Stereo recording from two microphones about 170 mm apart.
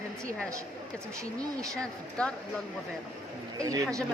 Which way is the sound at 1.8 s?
5° left (ahead or behind).